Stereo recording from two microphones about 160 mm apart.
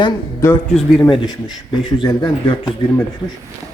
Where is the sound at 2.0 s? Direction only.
30° left (ahead or behind).